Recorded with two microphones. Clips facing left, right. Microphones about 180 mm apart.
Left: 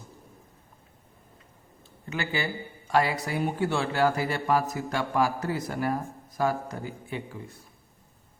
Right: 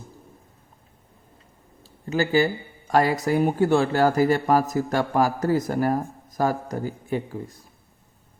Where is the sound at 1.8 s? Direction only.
35° right (ahead or behind).